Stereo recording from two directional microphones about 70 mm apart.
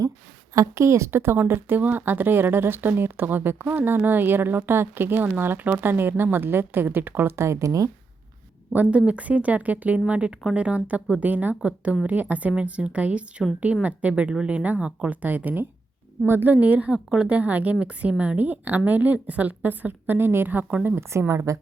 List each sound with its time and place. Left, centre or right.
0.5 s speech: right
8.7 s a woman's voice: right
20.8 s speech: right